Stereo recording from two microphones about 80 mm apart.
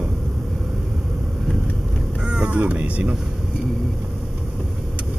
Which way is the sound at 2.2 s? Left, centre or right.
Centre.